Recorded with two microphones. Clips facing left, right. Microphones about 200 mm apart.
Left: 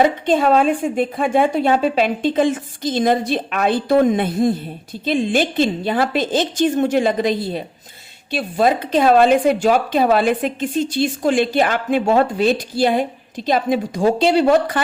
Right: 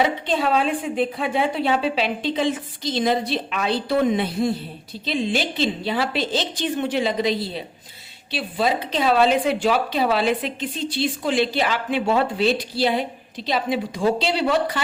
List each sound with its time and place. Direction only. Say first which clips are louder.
0.0 s speech: left 6 dB; 45° left (ahead or behind)